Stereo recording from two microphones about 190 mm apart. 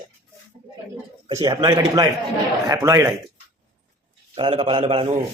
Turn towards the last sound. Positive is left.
turn(degrees=-30)  # may be behind; listen again after turning